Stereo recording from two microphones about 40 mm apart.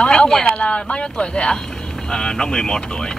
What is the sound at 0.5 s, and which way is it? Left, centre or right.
Speech, left.